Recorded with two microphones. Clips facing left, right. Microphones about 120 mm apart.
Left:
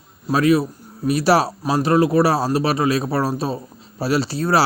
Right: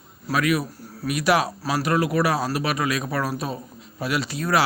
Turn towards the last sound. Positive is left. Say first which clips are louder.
# left 5 dB
turn(degrees=30)  # may be behind; listen again after turning